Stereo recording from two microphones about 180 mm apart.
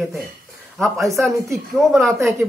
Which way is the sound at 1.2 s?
Centre (ahead or behind).